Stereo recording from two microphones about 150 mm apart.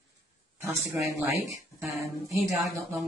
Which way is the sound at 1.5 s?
20° right (ahead or behind).